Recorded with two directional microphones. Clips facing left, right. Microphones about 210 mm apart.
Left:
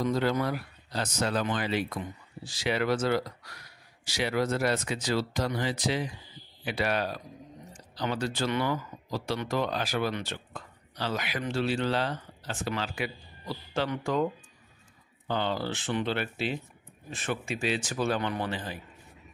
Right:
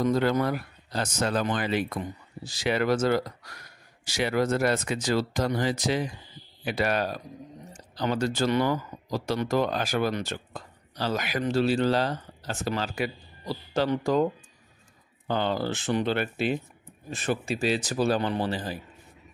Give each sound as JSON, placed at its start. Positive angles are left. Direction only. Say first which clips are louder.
{"t": 0.0, "sound": "speech", "louder": "right 3 dB", "side_deg": -50}
{"t": 15.2, "sound": "speech", "louder": "right 3 dB", "side_deg": -45}
{"t": 17.1, "sound": "speech", "louder": "right 4 dB", "side_deg": -35}